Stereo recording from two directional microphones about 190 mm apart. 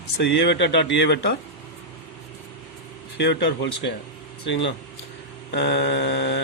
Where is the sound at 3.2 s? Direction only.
65° left (ahead or behind).